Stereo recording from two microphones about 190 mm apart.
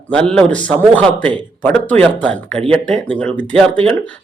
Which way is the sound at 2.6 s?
30° right (ahead or behind).